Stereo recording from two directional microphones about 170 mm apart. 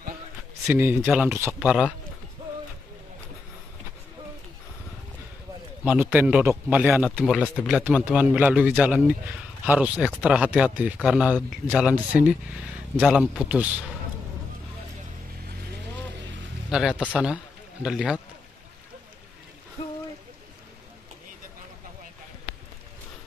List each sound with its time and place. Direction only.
0.7 s a man's voice: 15° right (ahead or behind)
5.9 s a man's voice: 10° right (ahead or behind)
17.1 s speech: 5° right (ahead or behind)